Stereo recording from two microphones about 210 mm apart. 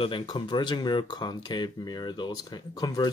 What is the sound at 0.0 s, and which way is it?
Speech, 25° left (ahead or behind).